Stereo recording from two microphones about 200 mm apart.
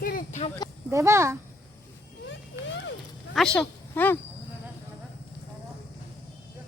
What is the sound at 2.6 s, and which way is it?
Music, 15° right (ahead or behind).